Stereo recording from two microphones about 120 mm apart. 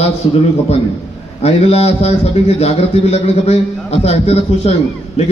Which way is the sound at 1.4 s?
60° left (ahead or behind).